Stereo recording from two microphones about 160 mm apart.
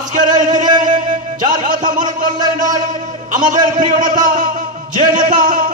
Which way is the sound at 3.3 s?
55° right (ahead or behind).